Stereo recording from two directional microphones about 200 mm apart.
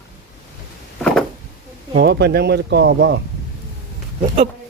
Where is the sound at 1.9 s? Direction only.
55° right (ahead or behind).